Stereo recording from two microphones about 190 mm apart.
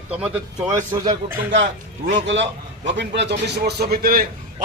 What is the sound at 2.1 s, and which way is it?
A man's voice, 70° right (ahead or behind).